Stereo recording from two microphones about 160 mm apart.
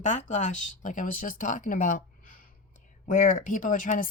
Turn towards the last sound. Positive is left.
turn(degrees=55)  # may be behind; listen again after turning